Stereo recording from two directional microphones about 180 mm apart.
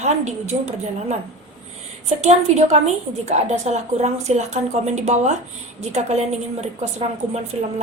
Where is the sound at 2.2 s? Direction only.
40° right (ahead or behind).